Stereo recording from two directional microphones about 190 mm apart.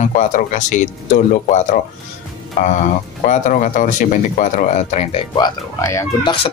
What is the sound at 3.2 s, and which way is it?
Speech, 40° left (ahead or behind).